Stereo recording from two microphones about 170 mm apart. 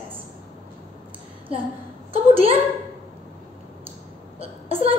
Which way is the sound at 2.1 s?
35° right (ahead or behind).